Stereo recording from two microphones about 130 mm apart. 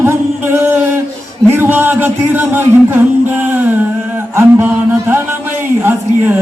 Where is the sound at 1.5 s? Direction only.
15° right (ahead or behind).